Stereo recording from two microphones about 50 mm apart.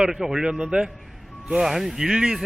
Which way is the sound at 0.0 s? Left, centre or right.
Centre.